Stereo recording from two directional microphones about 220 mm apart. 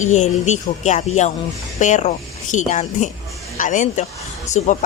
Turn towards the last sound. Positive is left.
turn(degrees=30)  # may be behind; listen again after turning